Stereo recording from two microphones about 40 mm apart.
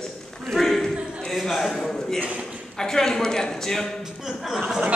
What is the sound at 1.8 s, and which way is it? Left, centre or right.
A man's voice, centre.